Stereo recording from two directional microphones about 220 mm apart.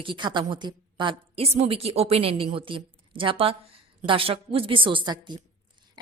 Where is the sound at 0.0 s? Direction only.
20° right (ahead or behind).